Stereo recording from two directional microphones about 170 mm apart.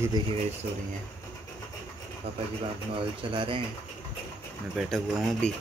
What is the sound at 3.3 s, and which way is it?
Speech, 30° right (ahead or behind).